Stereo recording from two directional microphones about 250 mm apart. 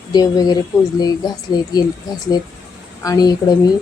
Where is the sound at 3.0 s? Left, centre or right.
Centre.